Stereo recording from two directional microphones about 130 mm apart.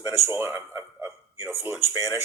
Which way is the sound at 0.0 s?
20° right (ahead or behind).